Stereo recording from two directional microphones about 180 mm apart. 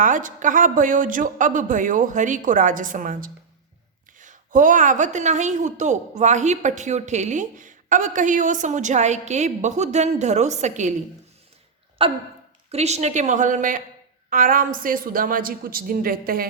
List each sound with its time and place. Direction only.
0.0 s a woman's voice: 45° right (ahead or behind)
12.0 s hiccup: 30° right (ahead or behind)
12.7 s a woman's voice: 35° right (ahead or behind); by 16.5 s 55° right (ahead or behind)